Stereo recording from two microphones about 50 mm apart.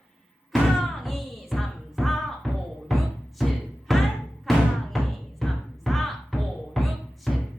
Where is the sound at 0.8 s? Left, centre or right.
Centre.